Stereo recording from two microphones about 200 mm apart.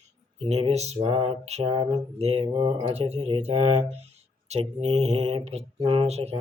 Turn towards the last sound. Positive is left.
turn(degrees=-30)  # may be behind; listen again after turning